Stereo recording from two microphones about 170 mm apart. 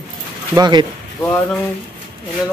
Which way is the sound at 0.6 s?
25° right (ahead or behind).